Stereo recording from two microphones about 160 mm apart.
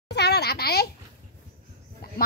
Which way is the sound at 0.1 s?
90° left.